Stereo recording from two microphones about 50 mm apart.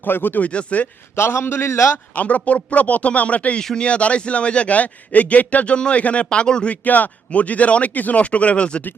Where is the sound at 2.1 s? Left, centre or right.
Left.